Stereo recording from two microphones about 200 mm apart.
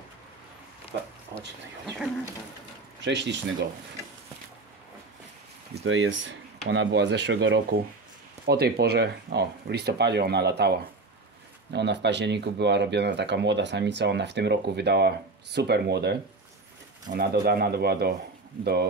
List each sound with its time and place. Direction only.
3.0 s speech: 60° right (ahead or behind)
5.8 s speech: 65° right (ahead or behind)